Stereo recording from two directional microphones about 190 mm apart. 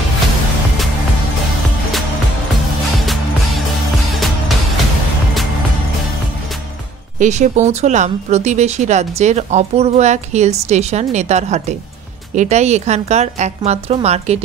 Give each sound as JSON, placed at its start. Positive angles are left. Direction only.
{"t": 7.2, "sound": "speech", "side_deg": -40}